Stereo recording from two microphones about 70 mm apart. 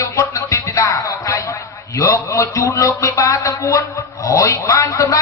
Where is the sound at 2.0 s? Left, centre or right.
Left.